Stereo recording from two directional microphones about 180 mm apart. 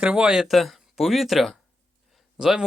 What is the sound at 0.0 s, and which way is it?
Speech, 5° right (ahead or behind).